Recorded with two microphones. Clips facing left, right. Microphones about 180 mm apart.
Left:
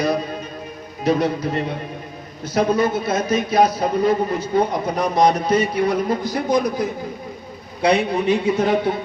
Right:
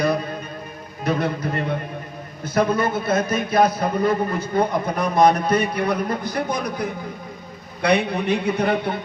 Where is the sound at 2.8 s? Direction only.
55° right (ahead or behind).